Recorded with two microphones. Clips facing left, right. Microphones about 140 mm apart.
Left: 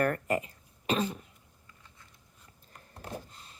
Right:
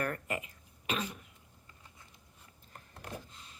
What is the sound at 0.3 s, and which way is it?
Throat clearing, 35° left (ahead or behind).